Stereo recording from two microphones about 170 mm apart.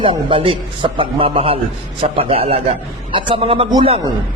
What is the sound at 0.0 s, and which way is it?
A man's voice, 30° right (ahead or behind).